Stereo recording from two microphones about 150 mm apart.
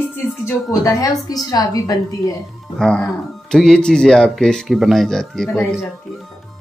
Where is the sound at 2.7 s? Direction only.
5° left (ahead or behind).